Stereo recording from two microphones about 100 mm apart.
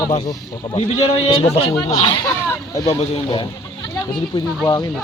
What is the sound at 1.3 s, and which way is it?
Speech, 80° left.